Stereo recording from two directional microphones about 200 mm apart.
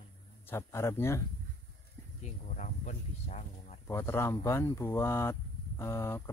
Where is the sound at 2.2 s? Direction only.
40° left (ahead or behind).